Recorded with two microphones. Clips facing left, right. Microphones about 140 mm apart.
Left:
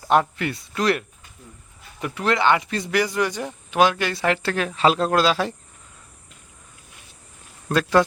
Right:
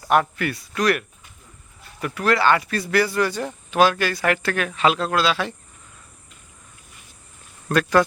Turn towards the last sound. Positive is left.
turn(degrees=25)  # may be behind; listen again after turning